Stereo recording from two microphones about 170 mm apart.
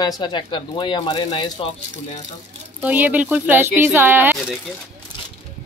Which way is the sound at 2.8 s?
10° right (ahead or behind).